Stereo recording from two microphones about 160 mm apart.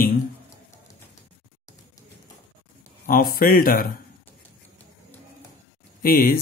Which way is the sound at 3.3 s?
65° left (ahead or behind).